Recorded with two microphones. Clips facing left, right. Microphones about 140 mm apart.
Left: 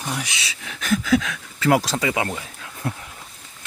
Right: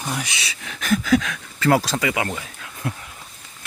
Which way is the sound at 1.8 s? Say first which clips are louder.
Even; 25° left (ahead or behind).